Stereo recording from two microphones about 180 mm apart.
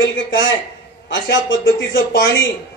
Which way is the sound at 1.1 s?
90° left.